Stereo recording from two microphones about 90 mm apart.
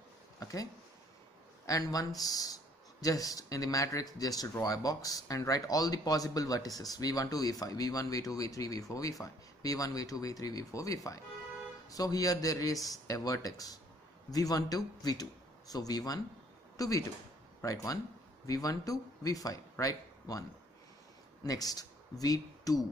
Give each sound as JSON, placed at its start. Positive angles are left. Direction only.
{"t": 0.4, "sound": "speech", "side_deg": 40}
{"t": 1.7, "sound": "speech", "side_deg": 40}
{"t": 21.5, "sound": "speech", "side_deg": 45}